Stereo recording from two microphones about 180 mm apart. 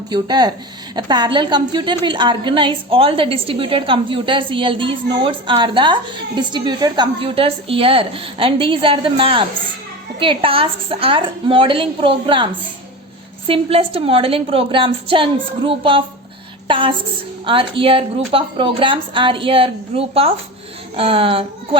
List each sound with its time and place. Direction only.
0.1 s a woman's voice: 25° right (ahead or behind)
13.5 s a woman's voice: 30° right (ahead or behind)
16.6 s a sound: 30° right (ahead or behind)
17.4 s a woman's voice: 30° right (ahead or behind)